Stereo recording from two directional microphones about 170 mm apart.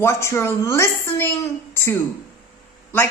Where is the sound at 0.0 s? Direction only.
15° left (ahead or behind).